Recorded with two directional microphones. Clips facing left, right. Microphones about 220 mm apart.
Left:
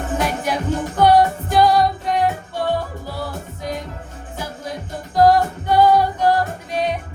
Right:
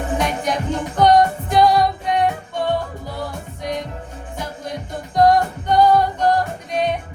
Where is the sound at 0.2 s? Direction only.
5° left (ahead or behind).